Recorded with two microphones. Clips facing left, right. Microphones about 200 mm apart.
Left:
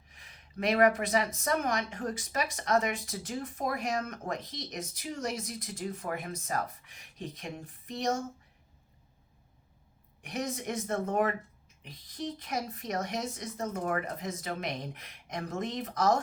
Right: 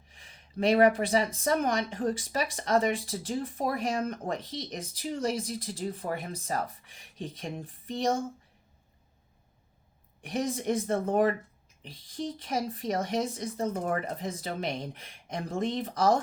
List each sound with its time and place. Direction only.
0.1 s speech: 30° right (ahead or behind)
10.2 s speech: 30° right (ahead or behind)